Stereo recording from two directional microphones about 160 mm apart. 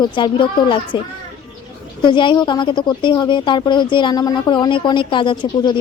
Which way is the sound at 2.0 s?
30° left (ahead or behind).